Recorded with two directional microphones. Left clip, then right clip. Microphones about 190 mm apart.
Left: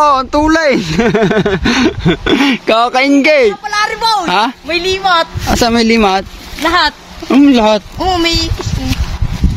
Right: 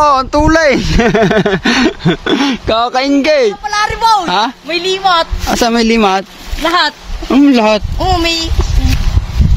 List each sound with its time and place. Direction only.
0.0 s speech: 5° right (ahead or behind)
6.6 s speech: 15° left (ahead or behind)
7.2 s speech: 5° right (ahead or behind)
8.0 s speech: 10° left (ahead or behind)